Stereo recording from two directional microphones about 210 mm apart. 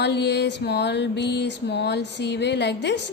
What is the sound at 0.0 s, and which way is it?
A woman's voice, 55° left (ahead or behind).